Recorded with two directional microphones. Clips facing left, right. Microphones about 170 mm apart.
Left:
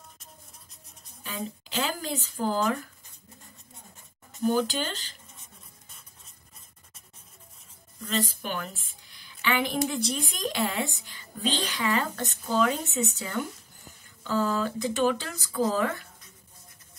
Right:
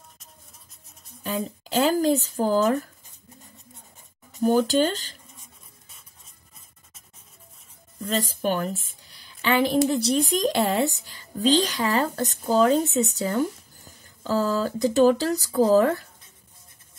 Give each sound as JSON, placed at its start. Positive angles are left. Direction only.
{"t": 1.2, "sound": "a woman's voice", "side_deg": -40}
{"t": 4.4, "sound": "speech", "side_deg": -45}
{"t": 8.0, "sound": "a woman's voice", "side_deg": -40}